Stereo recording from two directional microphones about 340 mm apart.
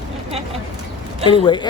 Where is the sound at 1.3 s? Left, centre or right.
Centre.